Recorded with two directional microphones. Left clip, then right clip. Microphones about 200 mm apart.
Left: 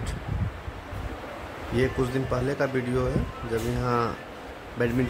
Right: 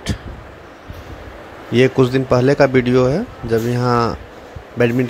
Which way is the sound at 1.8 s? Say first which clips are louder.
Right 12 dB; 30° right (ahead or behind).